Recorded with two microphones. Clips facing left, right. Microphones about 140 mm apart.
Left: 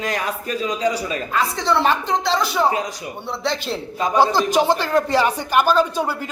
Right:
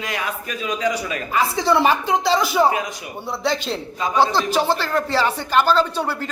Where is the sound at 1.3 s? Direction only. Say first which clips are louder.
Right 2 dB; 5° right (ahead or behind).